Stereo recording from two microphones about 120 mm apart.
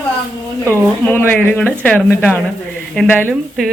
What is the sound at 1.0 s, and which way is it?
Speech, 15° left (ahead or behind).